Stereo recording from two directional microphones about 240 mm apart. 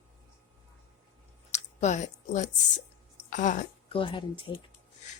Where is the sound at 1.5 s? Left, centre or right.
Left.